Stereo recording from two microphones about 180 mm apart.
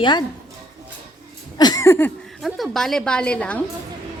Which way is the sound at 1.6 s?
20° left (ahead or behind).